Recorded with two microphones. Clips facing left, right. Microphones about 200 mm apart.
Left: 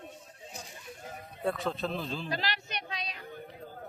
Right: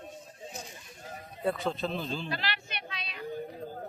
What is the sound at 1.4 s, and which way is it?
Speech, centre (ahead or behind).